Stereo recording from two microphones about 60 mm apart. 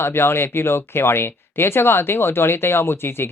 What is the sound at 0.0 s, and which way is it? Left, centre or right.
Speech, left.